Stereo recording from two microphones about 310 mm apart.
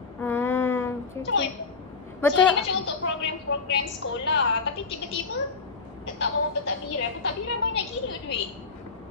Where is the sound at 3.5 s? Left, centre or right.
Left.